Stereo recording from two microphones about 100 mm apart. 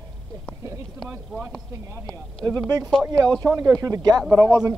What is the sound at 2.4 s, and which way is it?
Speech, 5° left (ahead or behind).